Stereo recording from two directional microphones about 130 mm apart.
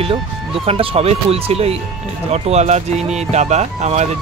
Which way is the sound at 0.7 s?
50° right (ahead or behind).